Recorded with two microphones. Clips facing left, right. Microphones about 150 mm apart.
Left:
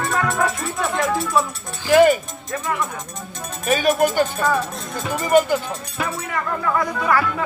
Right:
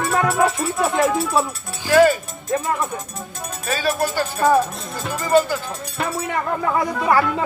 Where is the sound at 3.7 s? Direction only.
20° left (ahead or behind).